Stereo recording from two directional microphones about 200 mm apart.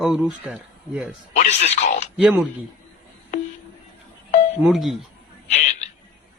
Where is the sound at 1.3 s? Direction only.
35° left (ahead or behind).